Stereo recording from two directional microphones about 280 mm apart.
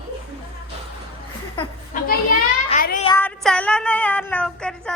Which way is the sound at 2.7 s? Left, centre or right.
Left.